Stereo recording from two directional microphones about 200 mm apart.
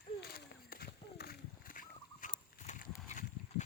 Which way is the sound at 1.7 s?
40° left (ahead or behind).